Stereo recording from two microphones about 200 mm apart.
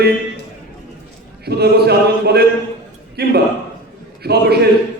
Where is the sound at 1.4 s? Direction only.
55° right (ahead or behind).